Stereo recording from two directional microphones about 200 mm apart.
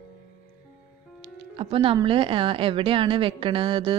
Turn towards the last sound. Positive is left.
turn(degrees=-25)  # may be behind; listen again after turning